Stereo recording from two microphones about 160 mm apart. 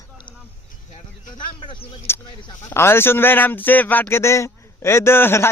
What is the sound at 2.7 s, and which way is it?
Speech, 15° left (ahead or behind).